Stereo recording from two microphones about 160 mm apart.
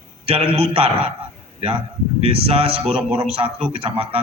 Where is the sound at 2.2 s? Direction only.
35° right (ahead or behind).